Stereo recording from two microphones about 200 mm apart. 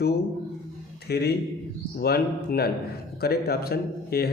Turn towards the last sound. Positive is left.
turn(degrees=50)  # may be behind; listen again after turning